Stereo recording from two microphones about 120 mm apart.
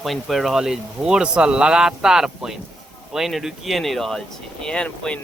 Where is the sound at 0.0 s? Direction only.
Centre (ahead or behind).